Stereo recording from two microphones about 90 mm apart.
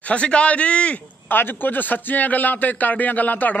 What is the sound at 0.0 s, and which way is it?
A man's voice, 15° left (ahead or behind).